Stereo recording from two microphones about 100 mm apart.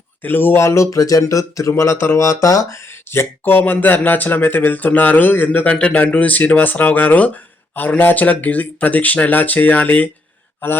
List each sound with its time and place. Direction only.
0.2 s speech: 20° left (ahead or behind); by 2.6 s 35° left (ahead or behind)
3.1 s speech: 25° left (ahead or behind)